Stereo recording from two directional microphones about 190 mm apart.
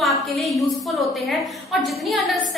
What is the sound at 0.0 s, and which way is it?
A woman's voice, centre (ahead or behind).